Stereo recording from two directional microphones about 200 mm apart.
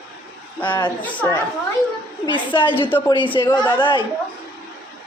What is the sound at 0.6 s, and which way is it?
Speech, 20° left (ahead or behind).